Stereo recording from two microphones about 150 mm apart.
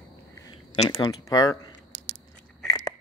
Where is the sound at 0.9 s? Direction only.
25° left (ahead or behind).